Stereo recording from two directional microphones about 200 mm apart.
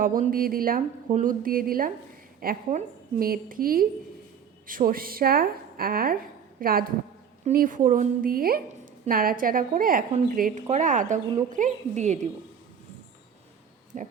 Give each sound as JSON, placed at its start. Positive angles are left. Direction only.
{"t": 0.0, "sound": "a woman's voice", "side_deg": -45}
{"t": 13.9, "sound": "a woman's voice", "side_deg": -40}